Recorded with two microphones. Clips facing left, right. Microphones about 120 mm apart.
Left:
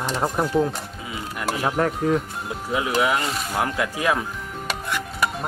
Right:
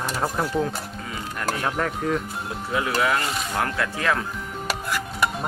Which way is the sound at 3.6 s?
15° left (ahead or behind).